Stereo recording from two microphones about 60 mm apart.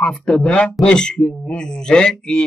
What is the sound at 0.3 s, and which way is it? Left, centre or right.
A man's voice, centre.